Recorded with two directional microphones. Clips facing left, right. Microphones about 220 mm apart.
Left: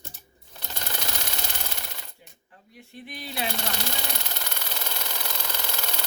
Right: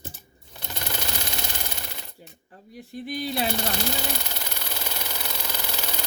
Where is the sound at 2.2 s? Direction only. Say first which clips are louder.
Right 7 dB; 40° right (ahead or behind).